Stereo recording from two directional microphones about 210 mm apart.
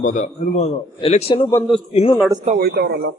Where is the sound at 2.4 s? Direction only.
45° right (ahead or behind).